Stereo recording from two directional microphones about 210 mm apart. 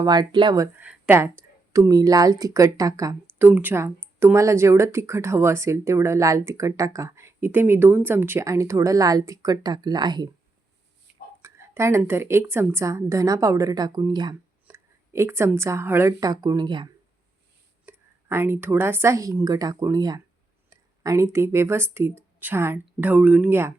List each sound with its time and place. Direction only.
0.0 s speech: 20° right (ahead or behind)
11.4 s a woman's voice: 15° right (ahead or behind)